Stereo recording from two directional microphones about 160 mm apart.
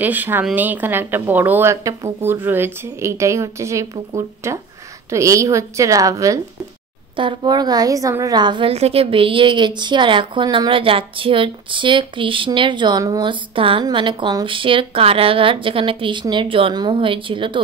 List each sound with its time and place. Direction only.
0.0 s a woman's voice: 10° right (ahead or behind); by 17.6 s 30° right (ahead or behind)